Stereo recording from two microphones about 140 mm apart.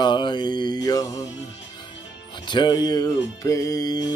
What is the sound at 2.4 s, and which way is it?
Speech, 35° left (ahead or behind).